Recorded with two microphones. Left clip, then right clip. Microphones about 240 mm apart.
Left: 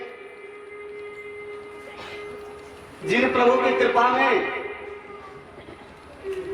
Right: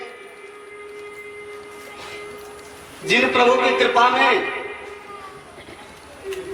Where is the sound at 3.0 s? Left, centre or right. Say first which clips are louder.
Right 3 dB; centre.